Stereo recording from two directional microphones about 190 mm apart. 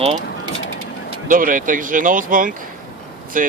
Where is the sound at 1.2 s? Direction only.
45° right (ahead or behind).